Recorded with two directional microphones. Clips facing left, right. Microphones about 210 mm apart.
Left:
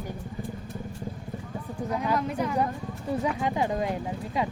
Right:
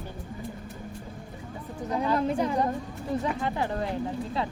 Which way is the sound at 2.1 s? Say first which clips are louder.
Right 2 dB; 30° right (ahead or behind).